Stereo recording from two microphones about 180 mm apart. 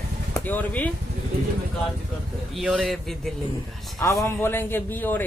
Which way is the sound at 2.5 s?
Centre (ahead or behind).